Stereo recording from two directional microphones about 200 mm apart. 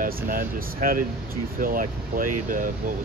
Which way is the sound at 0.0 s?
45° right (ahead or behind).